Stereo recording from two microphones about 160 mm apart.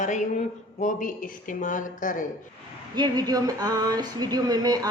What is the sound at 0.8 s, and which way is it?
Speech, 55° left (ahead or behind).